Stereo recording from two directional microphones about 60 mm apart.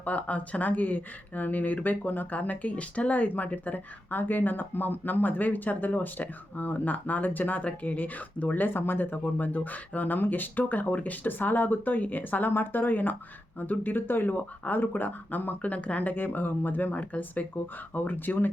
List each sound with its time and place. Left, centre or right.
0.0 s speech: left